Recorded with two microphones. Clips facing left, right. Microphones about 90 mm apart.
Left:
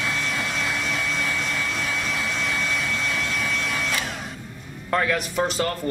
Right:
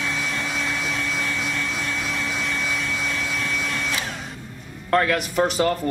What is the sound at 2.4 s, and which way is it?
Vacuum cleaner, centre (ahead or behind).